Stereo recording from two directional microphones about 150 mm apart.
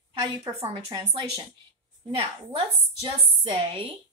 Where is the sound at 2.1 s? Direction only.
35° right (ahead or behind).